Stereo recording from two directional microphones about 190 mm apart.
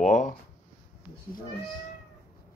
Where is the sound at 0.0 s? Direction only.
40° left (ahead or behind).